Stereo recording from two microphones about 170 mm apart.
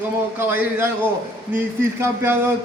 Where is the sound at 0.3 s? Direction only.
10° right (ahead or behind).